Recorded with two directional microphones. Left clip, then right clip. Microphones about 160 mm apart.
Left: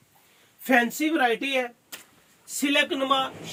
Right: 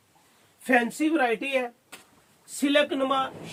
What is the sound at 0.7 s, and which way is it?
Speech, 25° right (ahead or behind).